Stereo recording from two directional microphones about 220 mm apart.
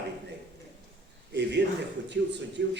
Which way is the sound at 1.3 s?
50° right (ahead or behind).